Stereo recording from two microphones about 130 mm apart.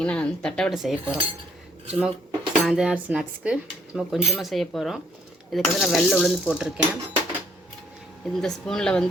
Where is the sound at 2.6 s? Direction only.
5° right (ahead or behind).